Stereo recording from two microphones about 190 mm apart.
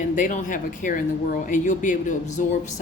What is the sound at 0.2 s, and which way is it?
Speech, 45° left (ahead or behind).